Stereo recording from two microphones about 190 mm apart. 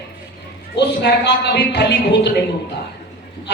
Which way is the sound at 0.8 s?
65° left (ahead or behind).